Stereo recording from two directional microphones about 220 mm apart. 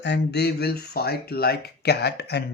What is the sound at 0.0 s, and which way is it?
Speech, 50° left (ahead or behind).